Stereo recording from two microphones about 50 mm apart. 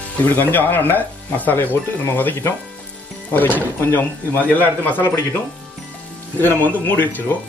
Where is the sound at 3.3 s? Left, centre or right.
Left.